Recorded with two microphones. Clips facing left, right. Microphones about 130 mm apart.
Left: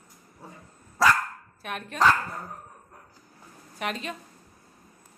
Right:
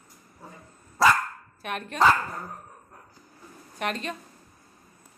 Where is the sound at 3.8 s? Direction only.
5° left (ahead or behind).